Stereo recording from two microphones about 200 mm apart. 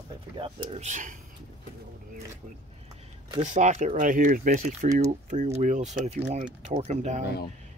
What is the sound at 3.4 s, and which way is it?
Speech, 35° right (ahead or behind).